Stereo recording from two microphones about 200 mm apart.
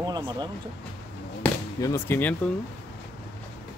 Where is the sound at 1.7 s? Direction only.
15° left (ahead or behind).